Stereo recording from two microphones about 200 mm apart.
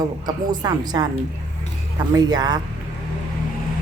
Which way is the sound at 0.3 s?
20° right (ahead or behind).